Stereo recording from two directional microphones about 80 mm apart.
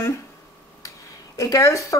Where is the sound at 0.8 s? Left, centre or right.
Left.